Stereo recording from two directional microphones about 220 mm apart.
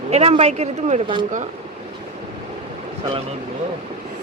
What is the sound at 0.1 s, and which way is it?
Speech, 30° right (ahead or behind).